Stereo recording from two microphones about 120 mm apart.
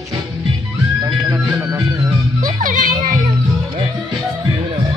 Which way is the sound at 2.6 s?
90° right.